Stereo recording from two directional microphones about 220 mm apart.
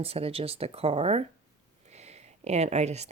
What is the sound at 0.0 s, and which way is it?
Speech, 25° right (ahead or behind).